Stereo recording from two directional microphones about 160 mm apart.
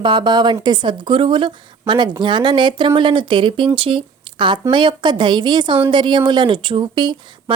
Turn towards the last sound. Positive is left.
turn(degrees=-30)  # may be behind; listen again after turning